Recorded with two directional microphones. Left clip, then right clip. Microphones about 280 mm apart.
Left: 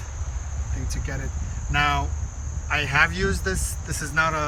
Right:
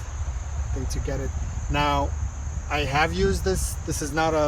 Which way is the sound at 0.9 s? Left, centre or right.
Centre.